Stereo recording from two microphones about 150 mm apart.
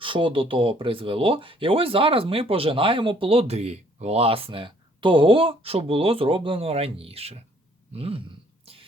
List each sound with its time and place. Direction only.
0.0 s speech: 35° right (ahead or behind)